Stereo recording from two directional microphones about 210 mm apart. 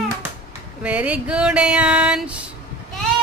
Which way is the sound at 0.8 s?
5° right (ahead or behind).